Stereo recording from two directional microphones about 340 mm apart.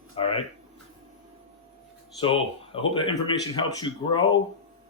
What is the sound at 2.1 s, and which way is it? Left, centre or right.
Speech, centre.